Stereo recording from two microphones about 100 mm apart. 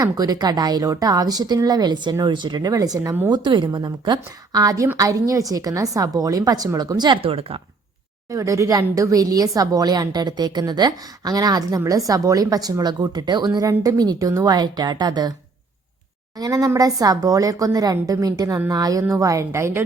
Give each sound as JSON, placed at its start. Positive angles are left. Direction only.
{"t": 0.0, "sound": "a woman's voice", "side_deg": -40}
{"t": 3.2, "sound": "a woman's voice", "side_deg": -50}
{"t": 7.2, "sound": "speech", "side_deg": -70}
{"t": 8.3, "sound": "a woman's voice", "side_deg": -30}
{"t": 16.4, "sound": "a woman's voice", "side_deg": -35}